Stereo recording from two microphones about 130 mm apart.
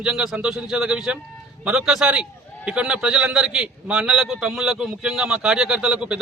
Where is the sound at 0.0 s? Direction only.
5° right (ahead or behind).